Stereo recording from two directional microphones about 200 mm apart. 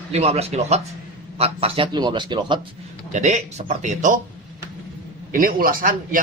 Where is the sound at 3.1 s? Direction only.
35° right (ahead or behind).